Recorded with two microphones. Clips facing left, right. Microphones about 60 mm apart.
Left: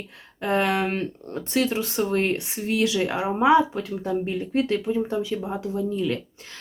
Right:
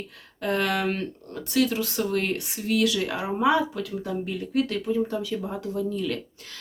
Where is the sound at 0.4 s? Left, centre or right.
Left.